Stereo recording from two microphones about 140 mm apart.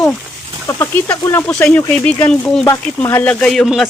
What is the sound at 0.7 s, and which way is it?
A woman's voice, 15° left (ahead or behind).